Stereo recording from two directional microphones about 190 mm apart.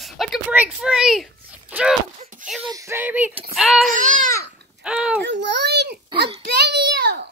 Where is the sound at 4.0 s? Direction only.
40° right (ahead or behind).